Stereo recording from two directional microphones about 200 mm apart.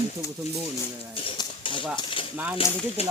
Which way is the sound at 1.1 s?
25° left (ahead or behind).